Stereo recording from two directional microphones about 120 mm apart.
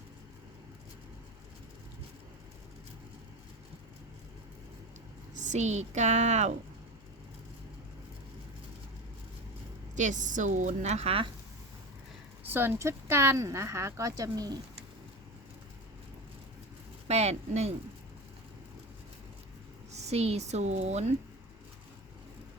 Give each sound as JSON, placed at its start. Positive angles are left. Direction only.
{"t": 5.4, "sound": "speech", "side_deg": -80}
{"t": 9.9, "sound": "a woman's voice", "side_deg": -90}
{"t": 12.4, "sound": "speech", "side_deg": -15}
{"t": 17.1, "sound": "speech", "side_deg": -65}
{"t": 19.9, "sound": "a woman's voice", "side_deg": -65}